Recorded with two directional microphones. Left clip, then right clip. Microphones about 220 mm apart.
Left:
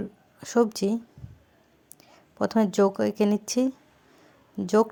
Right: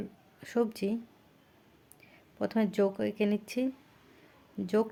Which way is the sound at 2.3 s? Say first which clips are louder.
Left 7 dB; 15° left (ahead or behind).